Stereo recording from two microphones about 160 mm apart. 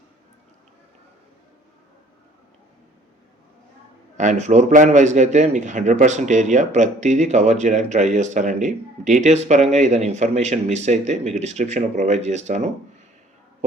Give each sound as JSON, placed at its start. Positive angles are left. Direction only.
{"t": 4.2, "sound": "a man's voice", "side_deg": -50}